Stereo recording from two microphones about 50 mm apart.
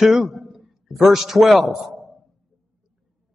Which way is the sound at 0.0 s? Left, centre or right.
Centre.